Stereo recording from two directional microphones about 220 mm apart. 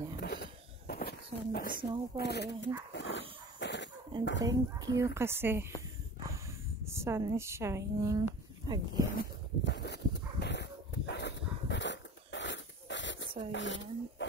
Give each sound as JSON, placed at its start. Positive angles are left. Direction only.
{"t": 0.2, "sound": "a sound", "side_deg": 45}
{"t": 2.1, "sound": "speech", "side_deg": 50}
{"t": 2.9, "sound": "dog", "side_deg": 55}
{"t": 4.4, "sound": "a woman's voice", "side_deg": -15}
{"t": 6.9, "sound": "speech", "side_deg": -10}
{"t": 9.2, "sound": "dog", "side_deg": 50}
{"t": 13.5, "sound": "speech", "side_deg": 55}